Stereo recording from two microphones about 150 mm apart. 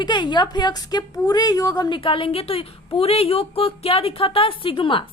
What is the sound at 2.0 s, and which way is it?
A woman's voice, 35° left (ahead or behind).